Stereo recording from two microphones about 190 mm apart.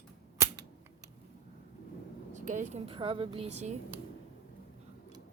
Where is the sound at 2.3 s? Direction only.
40° right (ahead or behind).